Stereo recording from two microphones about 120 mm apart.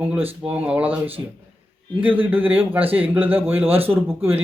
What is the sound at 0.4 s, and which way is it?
Speech, 15° right (ahead or behind).